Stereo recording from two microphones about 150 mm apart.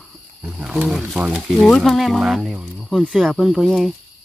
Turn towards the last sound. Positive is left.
turn(degrees=0)  # may be behind; listen again after turning